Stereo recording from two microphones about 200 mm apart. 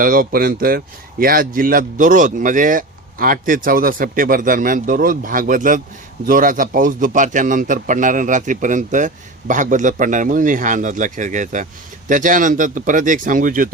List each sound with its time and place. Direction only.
0.0 s a man's voice: 45° right (ahead or behind)